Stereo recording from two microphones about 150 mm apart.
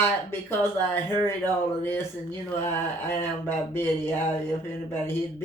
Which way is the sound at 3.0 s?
15° left (ahead or behind).